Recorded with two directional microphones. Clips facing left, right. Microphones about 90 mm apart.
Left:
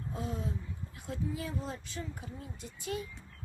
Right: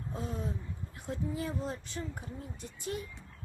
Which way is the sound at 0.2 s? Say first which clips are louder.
Even; 30° right (ahead or behind).